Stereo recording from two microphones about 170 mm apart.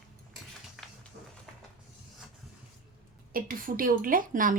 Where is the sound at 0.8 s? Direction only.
5° right (ahead or behind).